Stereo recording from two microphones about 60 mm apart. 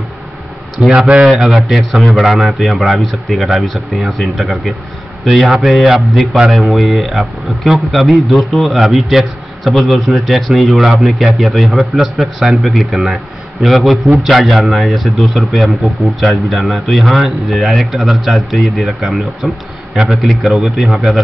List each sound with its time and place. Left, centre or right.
0.7 s speech: centre
1.2 s speech: centre
12.2 s speech: centre